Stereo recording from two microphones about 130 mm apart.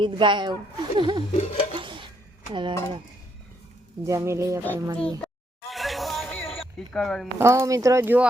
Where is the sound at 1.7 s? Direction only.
40° right (ahead or behind).